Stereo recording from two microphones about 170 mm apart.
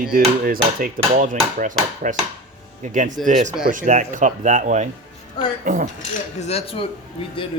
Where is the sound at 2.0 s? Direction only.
50° right (ahead or behind).